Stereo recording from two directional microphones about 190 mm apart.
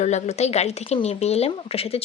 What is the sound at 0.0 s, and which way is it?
Speech, 35° left (ahead or behind).